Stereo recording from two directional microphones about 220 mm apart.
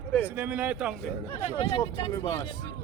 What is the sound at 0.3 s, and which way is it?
Speech, 5° right (ahead or behind).